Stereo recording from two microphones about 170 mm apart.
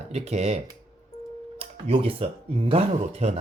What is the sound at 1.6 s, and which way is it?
Speech, 35° right (ahead or behind).